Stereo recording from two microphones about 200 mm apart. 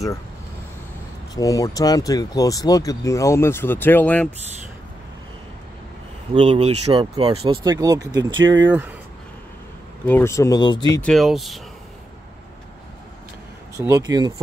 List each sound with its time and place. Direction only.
1.3 s speech: 15° left (ahead or behind)
6.3 s speech: 30° right (ahead or behind)
8.4 s speech: 70° right (ahead or behind)
10.0 s speech: 10° left (ahead or behind)
11.0 s speech: centre (ahead or behind)
13.7 s speech: 15° right (ahead or behind)